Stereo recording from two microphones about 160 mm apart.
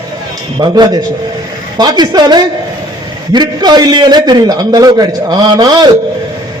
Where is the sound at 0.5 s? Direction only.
30° right (ahead or behind).